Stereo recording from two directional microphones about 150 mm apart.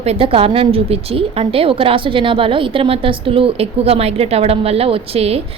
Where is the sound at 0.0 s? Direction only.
40° right (ahead or behind).